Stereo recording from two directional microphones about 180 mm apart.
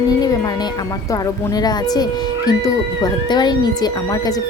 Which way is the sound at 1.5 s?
20° left (ahead or behind).